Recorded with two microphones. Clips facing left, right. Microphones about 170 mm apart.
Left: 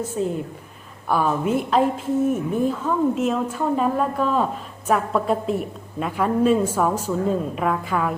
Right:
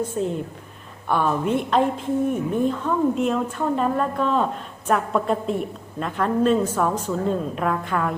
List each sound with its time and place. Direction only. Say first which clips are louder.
0.2 s a woman's voice: left 1 dB; centre (ahead or behind)